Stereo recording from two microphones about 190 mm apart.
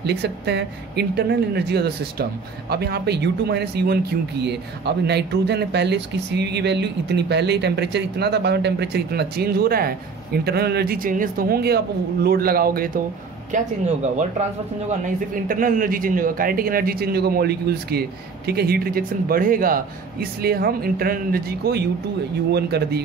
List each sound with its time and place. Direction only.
0.0 s speech: 60° right (ahead or behind); by 13.7 s 40° right (ahead or behind)
14.9 s a man's voice: 45° right (ahead or behind)